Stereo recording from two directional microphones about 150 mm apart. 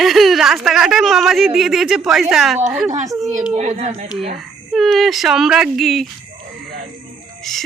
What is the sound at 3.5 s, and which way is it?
Speech, 50° right (ahead or behind).